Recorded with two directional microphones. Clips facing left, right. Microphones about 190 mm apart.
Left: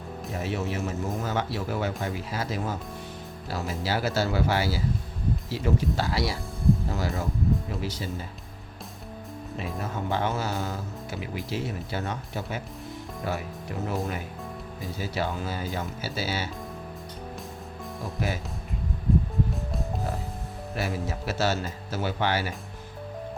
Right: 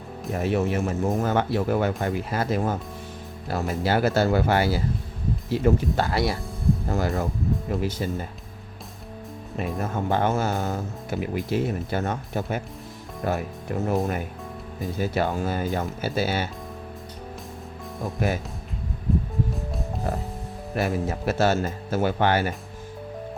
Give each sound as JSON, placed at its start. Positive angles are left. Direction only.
{"t": 0.3, "sound": "speech", "side_deg": -55}
{"t": 7.8, "sound": "speech", "side_deg": -55}
{"t": 9.8, "sound": "speech", "side_deg": -55}
{"t": 18.0, "sound": "speech", "side_deg": -55}
{"t": 20.7, "sound": "speech", "side_deg": -55}